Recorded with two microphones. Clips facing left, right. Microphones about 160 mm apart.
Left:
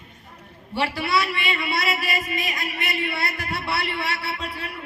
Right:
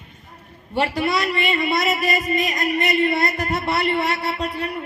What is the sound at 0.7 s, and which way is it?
Speech, 45° right (ahead or behind).